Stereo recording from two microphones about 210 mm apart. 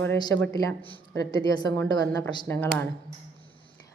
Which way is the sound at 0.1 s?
10° left (ahead or behind).